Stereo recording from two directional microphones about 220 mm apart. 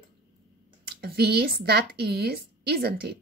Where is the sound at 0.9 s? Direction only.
45° right (ahead or behind).